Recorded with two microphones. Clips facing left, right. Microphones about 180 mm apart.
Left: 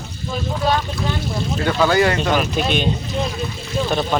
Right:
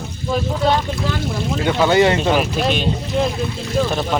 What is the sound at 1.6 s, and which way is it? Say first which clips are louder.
Speech: right 2 dB; 20° right (ahead or behind).